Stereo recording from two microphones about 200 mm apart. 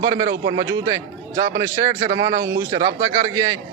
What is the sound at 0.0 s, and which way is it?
A man's voice, 20° right (ahead or behind).